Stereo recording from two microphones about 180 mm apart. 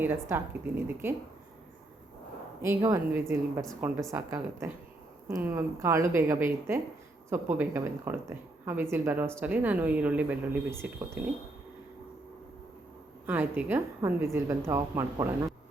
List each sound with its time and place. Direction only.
0.0 s a woman's voice: 10° right (ahead or behind)
2.6 s a woman's voice: 15° right (ahead or behind)
13.2 s a woman's voice: 10° right (ahead or behind)